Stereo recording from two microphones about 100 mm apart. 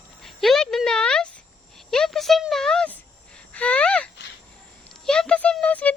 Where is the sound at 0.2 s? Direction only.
Centre (ahead or behind).